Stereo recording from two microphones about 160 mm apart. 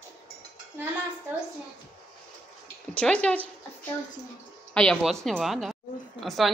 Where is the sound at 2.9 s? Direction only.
5° left (ahead or behind).